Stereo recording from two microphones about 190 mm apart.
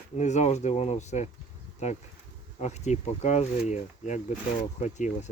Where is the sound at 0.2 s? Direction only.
40° left (ahead or behind).